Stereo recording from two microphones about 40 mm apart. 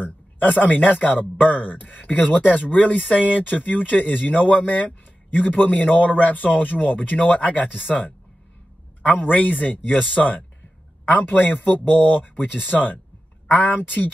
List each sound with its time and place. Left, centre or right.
0.4 s speech: left
11.9 s speech: left